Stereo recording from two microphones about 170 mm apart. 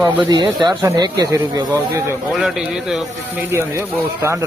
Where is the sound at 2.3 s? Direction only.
Centre (ahead or behind).